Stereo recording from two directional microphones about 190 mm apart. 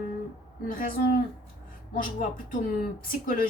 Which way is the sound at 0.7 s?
45° left (ahead or behind).